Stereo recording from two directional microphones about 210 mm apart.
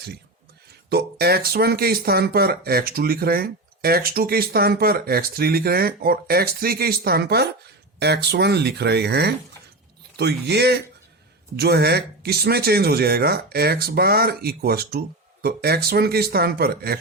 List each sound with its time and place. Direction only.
0.9 s speech: 50° right (ahead or behind)